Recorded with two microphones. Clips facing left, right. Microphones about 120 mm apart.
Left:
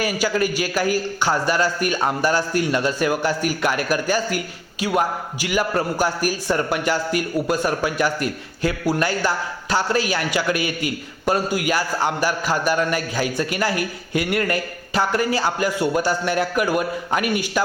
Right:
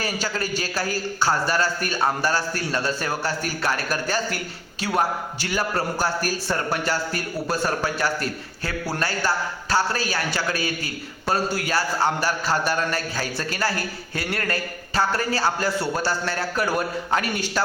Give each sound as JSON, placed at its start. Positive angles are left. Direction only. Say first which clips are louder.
{"t": 0.0, "sound": "a man's voice", "louder": "left 6 dB", "side_deg": 15}